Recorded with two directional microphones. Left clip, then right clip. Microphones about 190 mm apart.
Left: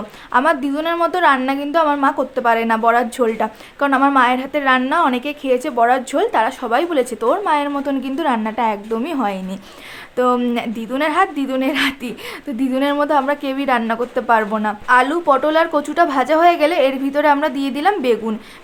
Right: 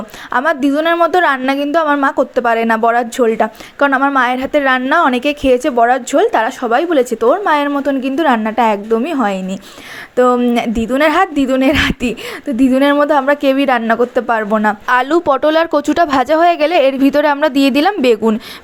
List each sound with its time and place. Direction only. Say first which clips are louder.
0.3 s a woman's voice: right 2 dB; 25° right (ahead or behind)
14.8 s a woman's voice: left 1 dB; 45° right (ahead or behind)